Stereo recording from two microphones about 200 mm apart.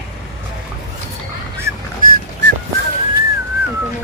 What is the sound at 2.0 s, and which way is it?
Dog, 45° right (ahead or behind).